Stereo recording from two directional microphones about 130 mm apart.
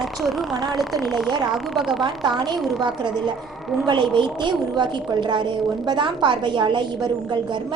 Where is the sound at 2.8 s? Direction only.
35° right (ahead or behind).